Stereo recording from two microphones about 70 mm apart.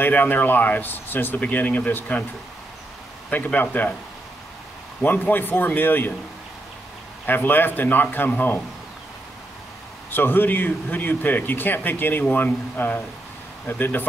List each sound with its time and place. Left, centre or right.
0.0 s speech: left
3.3 s speech: left
5.0 s speech: left
7.2 s speech: left
10.1 s speech: left